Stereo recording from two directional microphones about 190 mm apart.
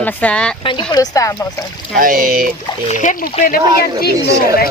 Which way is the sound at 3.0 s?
40° left (ahead or behind).